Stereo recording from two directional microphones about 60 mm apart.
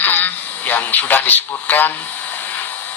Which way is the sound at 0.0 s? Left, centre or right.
Left.